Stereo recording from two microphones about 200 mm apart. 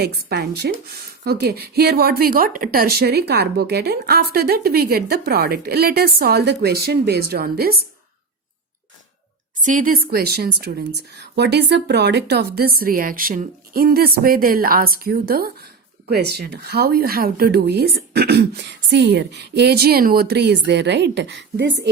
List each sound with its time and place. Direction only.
0.0 s a woman's voice: 50° right (ahead or behind)
9.6 s a woman's voice: 40° right (ahead or behind); by 21.8 s 60° right (ahead or behind)